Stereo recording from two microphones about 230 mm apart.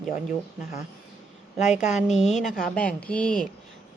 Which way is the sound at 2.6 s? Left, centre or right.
Centre.